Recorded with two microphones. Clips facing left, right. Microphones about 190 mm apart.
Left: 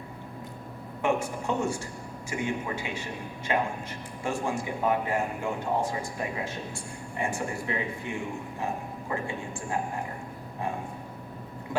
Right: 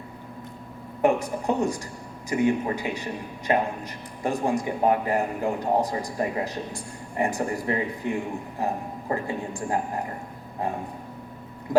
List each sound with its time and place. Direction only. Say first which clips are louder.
1.0 s a woman's voice: right 5 dB; 35° right (ahead or behind)
11.7 s vehicle: right 8 dB; 35° right (ahead or behind)